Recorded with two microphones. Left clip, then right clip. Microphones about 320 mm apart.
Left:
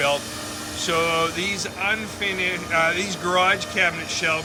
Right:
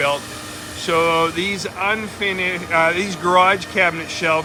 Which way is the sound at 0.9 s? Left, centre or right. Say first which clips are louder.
Right 5 dB; centre.